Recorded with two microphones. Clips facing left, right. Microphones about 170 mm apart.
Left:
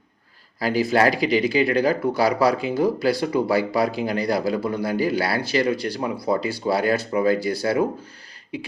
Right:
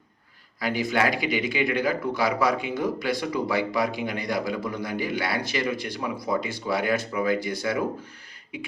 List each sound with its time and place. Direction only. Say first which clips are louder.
0.6 s speech: left 5 dB; 35° left (ahead or behind)